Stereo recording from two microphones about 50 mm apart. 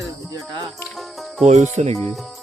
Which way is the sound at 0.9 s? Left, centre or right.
Centre.